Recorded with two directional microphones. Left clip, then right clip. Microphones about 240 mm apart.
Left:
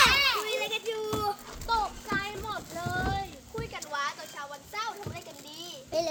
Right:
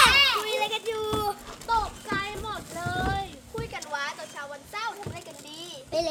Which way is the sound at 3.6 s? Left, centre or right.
Centre.